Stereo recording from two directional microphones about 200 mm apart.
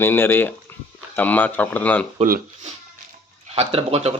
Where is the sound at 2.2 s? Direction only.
45° right (ahead or behind).